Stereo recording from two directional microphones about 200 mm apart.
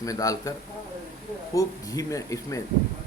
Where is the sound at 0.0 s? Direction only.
15° left (ahead or behind).